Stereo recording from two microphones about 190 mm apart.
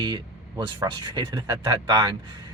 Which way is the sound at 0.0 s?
20° right (ahead or behind).